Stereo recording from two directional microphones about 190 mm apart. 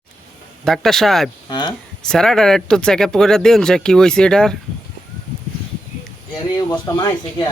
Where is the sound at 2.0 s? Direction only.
5° left (ahead or behind).